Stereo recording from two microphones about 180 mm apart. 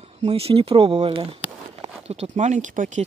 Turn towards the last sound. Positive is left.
turn(degrees=-45)  # may be behind; listen again after turning